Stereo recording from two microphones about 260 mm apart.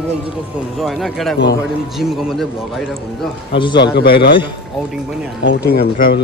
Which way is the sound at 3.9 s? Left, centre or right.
Left.